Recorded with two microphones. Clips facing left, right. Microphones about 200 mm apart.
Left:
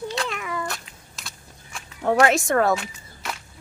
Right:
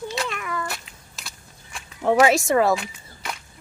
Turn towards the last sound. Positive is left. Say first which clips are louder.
# even
turn(degrees=0)  # may be behind; listen again after turning